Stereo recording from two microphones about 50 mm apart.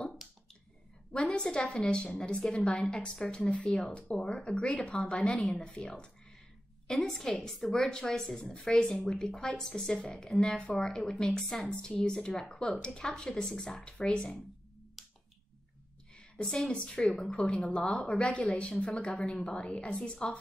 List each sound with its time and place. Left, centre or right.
1.1 s a woman's voice: centre
15.0 s finger snapping: centre
16.2 s a woman's voice: centre
17.6 s a woman's voice: centre
17.8 s a woman's voice: centre
19.5 s a woman's voice: left